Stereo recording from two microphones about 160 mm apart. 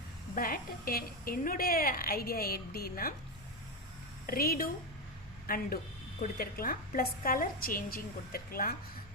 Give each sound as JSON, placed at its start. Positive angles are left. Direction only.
{"t": 0.3, "sound": "a woman's voice", "side_deg": 65}
{"t": 4.3, "sound": "a woman's voice", "side_deg": 65}